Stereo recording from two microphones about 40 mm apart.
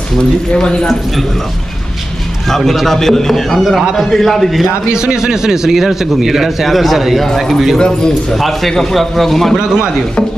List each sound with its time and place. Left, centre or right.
0.5 s speech: left
2.9 s a man's voice: centre
4.9 s a man's voice: centre
7.5 s a man's voice: centre